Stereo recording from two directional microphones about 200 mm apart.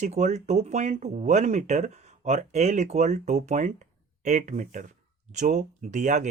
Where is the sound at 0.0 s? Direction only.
35° right (ahead or behind).